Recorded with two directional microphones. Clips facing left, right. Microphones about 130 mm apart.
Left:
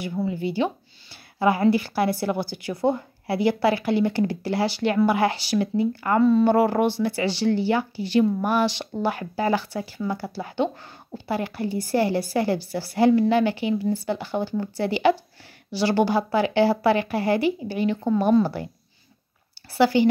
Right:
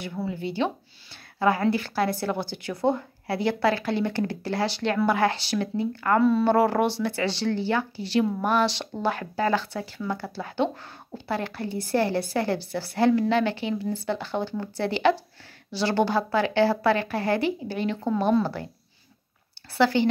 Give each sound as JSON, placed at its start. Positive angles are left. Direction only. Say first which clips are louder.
{"t": 0.3, "sound": "speech", "louder": "left 1 dB", "side_deg": 5}
{"t": 19.8, "sound": "speech", "louder": "left 3 dB", "side_deg": 10}